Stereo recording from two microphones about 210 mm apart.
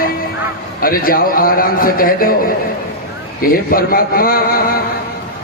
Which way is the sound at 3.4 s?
45° left (ahead or behind).